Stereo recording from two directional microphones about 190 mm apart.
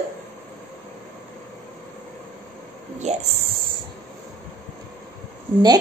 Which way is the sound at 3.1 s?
35° right (ahead or behind).